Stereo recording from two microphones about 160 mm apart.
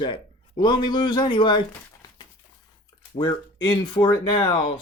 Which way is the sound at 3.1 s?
25° left (ahead or behind).